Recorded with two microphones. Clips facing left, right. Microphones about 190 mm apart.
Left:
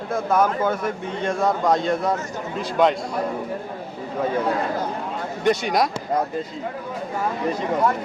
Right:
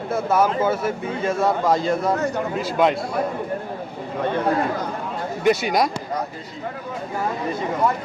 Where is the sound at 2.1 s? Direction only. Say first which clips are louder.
Right 7 dB; 65° right (ahead or behind).